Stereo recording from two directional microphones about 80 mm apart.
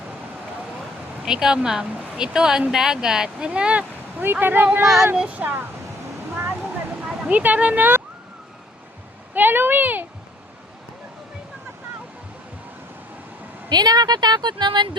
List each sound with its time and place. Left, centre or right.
1.2 s speech: centre; by 4.9 s right
5.1 s speech: centre
5.4 s speech: right
6.3 s a sound: right
7.1 s speech: centre
9.3 s speech: right
13.7 s speech: right